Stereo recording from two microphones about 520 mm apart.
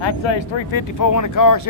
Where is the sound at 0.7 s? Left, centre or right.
Left.